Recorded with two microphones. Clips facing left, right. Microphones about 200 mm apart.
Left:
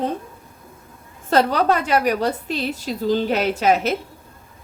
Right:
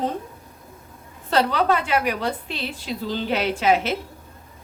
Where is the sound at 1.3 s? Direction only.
45° left (ahead or behind).